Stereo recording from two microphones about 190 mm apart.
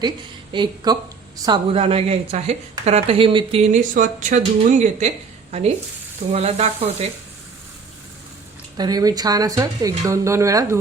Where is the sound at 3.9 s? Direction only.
40° right (ahead or behind).